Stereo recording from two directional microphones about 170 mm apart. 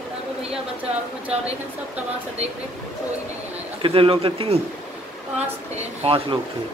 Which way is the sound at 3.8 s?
30° right (ahead or behind).